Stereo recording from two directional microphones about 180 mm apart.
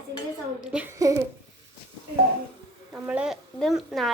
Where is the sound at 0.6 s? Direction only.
5° right (ahead or behind).